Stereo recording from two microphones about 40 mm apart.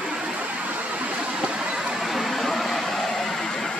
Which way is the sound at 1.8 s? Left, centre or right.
Centre.